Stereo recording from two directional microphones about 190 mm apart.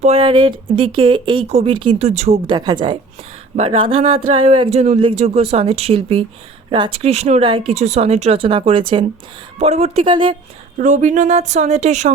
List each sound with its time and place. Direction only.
0.0 s speech: 30° right (ahead or behind)
10.8 s speech: 40° right (ahead or behind)